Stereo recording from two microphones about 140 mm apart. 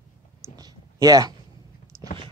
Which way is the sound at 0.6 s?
25° right (ahead or behind).